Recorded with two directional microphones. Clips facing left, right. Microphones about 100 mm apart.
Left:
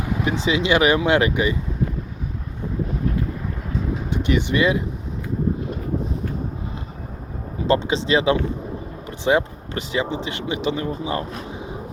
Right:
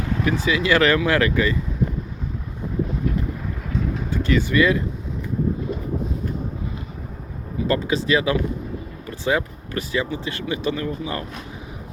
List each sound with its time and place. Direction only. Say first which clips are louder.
0.0 s speech: even; 15° left (ahead or behind)
4.1 s speech: right 1 dB; 20° left (ahead or behind)
7.7 s speech: left 2 dB; 25° left (ahead or behind)